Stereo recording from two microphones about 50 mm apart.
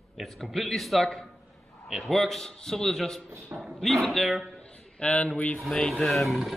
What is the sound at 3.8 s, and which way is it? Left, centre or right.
Speech, centre.